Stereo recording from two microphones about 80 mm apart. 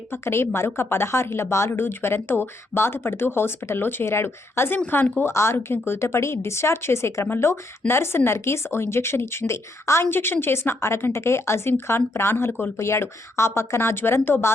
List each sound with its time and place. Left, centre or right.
0.1 s a woman's voice: left